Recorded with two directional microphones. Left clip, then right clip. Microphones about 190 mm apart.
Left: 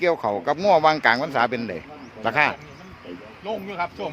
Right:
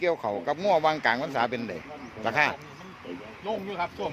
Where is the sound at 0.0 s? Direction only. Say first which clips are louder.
Left 5 dB; 25° left (ahead or behind).